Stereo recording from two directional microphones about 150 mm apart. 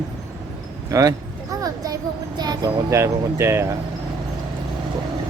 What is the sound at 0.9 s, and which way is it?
Speech, 20° right (ahead or behind).